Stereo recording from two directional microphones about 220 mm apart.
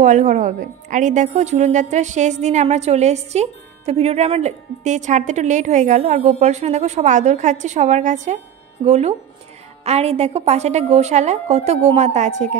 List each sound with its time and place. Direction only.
0.0 s a woman's voice: 35° right (ahead or behind)